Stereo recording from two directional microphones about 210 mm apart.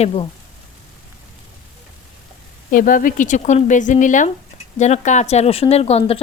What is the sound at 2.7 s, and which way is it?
Speech, 40° left (ahead or behind).